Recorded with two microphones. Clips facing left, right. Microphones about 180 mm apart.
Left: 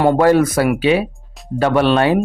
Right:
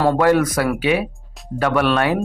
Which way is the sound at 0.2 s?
30° left (ahead or behind).